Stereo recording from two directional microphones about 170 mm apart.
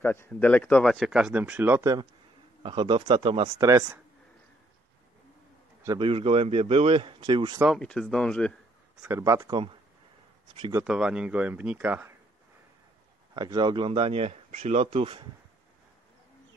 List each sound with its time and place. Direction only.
0.0 s speech: 10° left (ahead or behind); by 3.4 s 30° right (ahead or behind)
3.5 s speech: 20° right (ahead or behind)
5.9 s speech: 30° right (ahead or behind)
7.6 s speech: 5° left (ahead or behind)
9.0 s speech: 15° right (ahead or behind)
10.7 s speech: 5° right (ahead or behind)
13.3 s speech: 25° right (ahead or behind)